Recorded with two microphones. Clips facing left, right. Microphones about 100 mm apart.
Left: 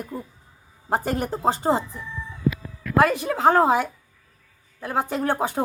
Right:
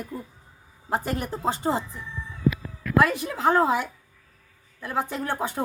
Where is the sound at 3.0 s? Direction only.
30° left (ahead or behind).